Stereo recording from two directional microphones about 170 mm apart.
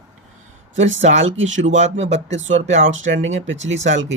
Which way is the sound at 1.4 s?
90° right.